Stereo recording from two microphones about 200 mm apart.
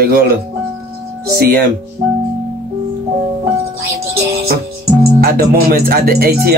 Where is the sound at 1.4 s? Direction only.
50° right (ahead or behind).